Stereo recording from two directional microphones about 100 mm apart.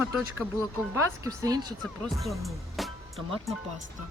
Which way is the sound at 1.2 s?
40° right (ahead or behind).